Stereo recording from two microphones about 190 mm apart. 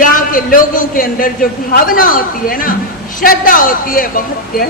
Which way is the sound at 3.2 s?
45° left (ahead or behind).